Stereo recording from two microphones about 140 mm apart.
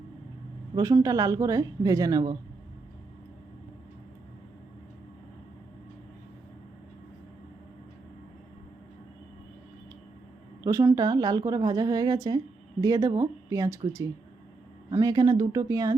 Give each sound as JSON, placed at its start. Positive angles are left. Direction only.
{"t": 0.8, "sound": "a woman's voice", "side_deg": -25}
{"t": 10.6, "sound": "a woman's voice", "side_deg": -20}